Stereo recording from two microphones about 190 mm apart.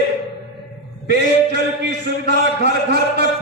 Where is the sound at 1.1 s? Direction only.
60° right (ahead or behind).